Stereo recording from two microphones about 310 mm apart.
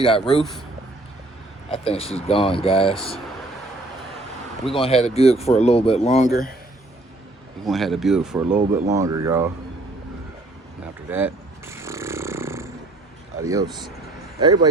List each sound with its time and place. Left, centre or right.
0.0 s speech: centre
1.7 s speech: centre
4.7 s speech: centre
7.6 s speech: centre
11.1 s snoring: centre
13.4 s speech: centre